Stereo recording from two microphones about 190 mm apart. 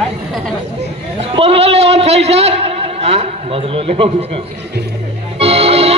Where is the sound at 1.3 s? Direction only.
30° right (ahead or behind).